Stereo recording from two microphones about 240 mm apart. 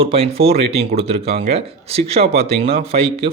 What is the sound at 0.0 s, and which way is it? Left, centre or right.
Speech, right.